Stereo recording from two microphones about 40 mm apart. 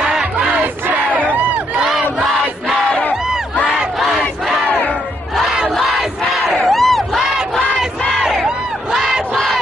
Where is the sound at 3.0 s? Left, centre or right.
Left.